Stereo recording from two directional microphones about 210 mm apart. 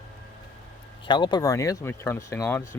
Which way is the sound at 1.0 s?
20° left (ahead or behind).